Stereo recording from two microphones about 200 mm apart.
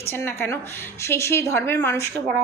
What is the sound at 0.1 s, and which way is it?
A woman's voice, 10° left (ahead or behind).